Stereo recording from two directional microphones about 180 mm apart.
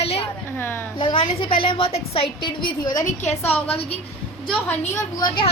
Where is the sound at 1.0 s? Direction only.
30° left (ahead or behind).